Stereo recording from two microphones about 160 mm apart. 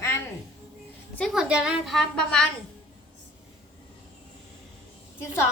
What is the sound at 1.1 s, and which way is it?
A woman's voice, centre (ahead or behind).